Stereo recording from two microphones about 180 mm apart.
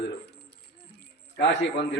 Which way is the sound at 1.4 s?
70° left (ahead or behind).